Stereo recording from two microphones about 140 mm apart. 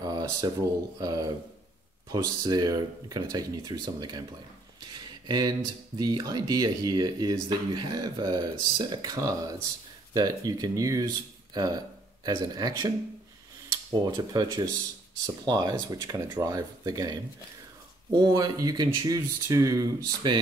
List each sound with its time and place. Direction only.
0.0 s a sound: 30° right (ahead or behind)
0.9 s speech: 25° right (ahead or behind)
5.2 s speech: 30° right (ahead or behind)
13.9 s speech: 30° right (ahead or behind)